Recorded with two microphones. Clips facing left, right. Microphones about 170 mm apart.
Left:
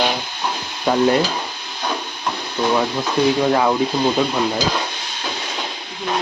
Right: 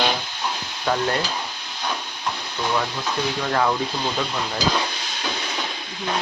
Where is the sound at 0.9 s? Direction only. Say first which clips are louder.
Left 7 dB; 15° left (ahead or behind).